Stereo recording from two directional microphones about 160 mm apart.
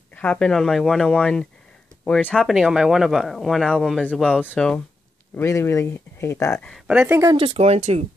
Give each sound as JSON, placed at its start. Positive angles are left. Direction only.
{"t": 0.1, "sound": "speech", "side_deg": 10}
{"t": 6.9, "sound": "speech", "side_deg": -10}
{"t": 7.3, "sound": "speech", "side_deg": -40}